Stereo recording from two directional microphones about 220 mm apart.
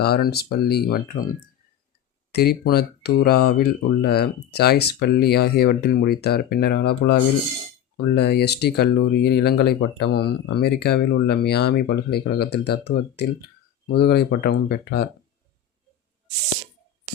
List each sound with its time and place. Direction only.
0.0 s speech: 45° left (ahead or behind)